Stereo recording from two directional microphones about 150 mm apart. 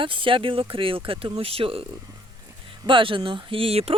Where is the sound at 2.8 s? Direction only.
35° right (ahead or behind).